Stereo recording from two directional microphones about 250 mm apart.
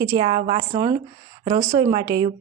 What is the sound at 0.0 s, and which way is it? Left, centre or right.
A woman's voice, centre.